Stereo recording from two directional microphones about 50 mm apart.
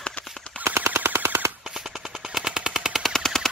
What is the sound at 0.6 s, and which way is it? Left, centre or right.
Machine gun, right.